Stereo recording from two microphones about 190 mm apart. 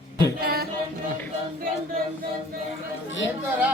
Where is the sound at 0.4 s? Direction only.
50° right (ahead or behind).